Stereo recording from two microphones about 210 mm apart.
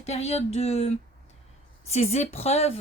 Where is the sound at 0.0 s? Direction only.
30° left (ahead or behind).